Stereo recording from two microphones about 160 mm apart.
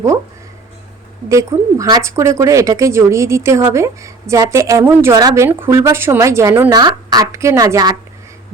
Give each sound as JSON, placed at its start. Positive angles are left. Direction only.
{"t": 1.3, "sound": "a woman's voice", "side_deg": -20}